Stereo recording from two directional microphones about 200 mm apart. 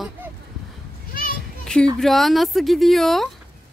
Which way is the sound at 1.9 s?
Centre (ahead or behind).